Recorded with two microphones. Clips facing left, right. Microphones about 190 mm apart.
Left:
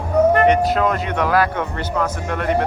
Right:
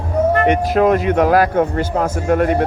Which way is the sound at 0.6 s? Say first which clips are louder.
Right 5 dB; 50° right (ahead or behind).